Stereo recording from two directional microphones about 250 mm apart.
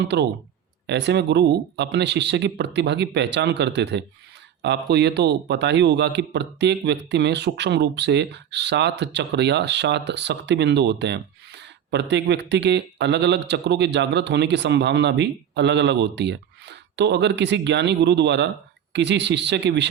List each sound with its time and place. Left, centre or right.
0.0 s a man's voice: right